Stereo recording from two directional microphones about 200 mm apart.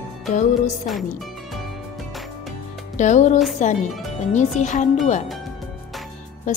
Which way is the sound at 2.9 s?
35° left (ahead or behind).